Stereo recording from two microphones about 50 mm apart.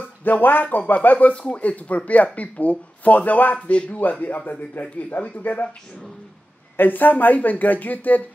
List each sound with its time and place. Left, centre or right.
0.2 s speech: left
3.5 s speech: left
4.0 s speech: left
6.8 s speech: left